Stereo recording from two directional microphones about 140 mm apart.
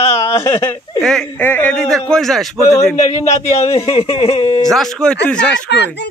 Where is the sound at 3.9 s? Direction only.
45° left (ahead or behind).